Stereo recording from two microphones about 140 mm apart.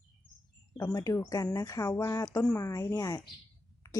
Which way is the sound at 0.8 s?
25° left (ahead or behind).